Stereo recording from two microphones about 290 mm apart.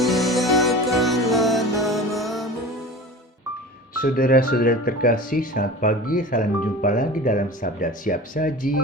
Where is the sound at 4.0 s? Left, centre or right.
Left.